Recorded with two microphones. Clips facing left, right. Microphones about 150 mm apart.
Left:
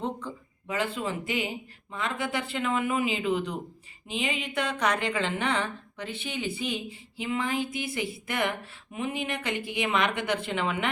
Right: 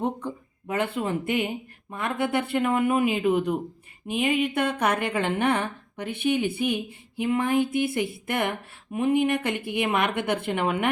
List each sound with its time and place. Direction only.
0.7 s a woman's voice: 55° right (ahead or behind)